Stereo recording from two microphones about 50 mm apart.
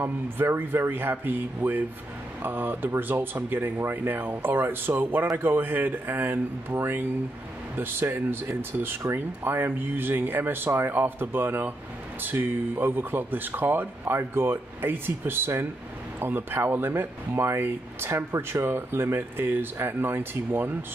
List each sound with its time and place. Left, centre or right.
0.0 s speech: right
14.0 s speech: right